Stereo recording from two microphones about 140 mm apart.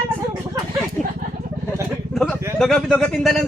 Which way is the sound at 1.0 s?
Centre (ahead or behind).